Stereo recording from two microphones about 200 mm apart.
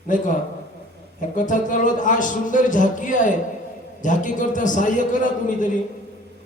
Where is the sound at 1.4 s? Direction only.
40° left (ahead or behind).